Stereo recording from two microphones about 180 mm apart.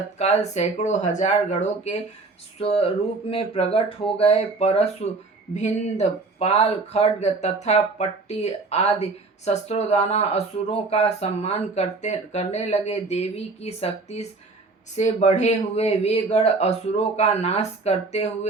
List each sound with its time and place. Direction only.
0.2 s speech: 40° left (ahead or behind)